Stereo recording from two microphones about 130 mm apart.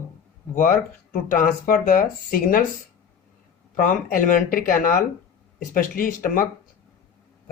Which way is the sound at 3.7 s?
90° left.